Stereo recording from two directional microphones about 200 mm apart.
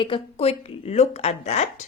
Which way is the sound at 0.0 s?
30° left (ahead or behind).